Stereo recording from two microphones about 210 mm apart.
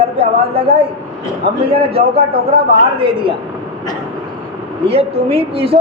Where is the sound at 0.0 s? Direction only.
25° right (ahead or behind).